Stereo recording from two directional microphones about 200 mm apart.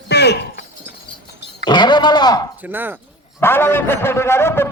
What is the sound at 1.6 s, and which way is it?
Speech, 20° left (ahead or behind).